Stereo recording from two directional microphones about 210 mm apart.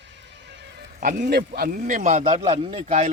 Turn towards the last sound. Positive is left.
turn(degrees=-30)  # may be behind; listen again after turning